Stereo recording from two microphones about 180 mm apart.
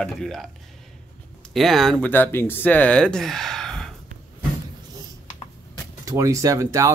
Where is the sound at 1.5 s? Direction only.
Centre (ahead or behind).